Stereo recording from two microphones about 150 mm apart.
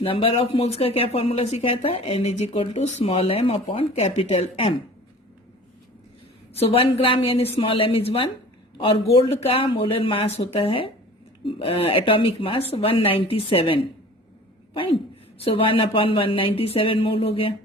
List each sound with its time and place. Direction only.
0.0 s speech: 35° left (ahead or behind)
6.6 s speech: 40° left (ahead or behind)
15.4 s speech: 35° left (ahead or behind)